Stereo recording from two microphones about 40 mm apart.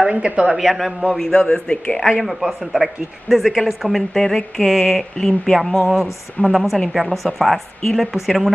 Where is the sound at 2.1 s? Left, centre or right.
Centre.